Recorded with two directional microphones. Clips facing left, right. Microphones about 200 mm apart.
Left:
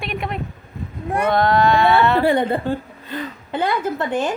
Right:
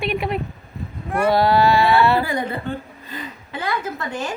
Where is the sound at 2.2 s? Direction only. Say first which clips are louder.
Left 7 dB; 30° left (ahead or behind).